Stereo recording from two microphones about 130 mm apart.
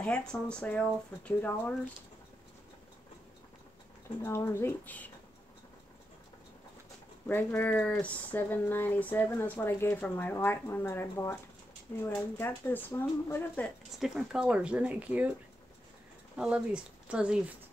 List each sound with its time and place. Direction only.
0.0 s speech: 10° left (ahead or behind)
4.2 s speech: 20° left (ahead or behind)
7.2 s a woman's voice: 15° left (ahead or behind)
13.9 s speech: 5° right (ahead or behind)
16.3 s speech: 10° right (ahead or behind)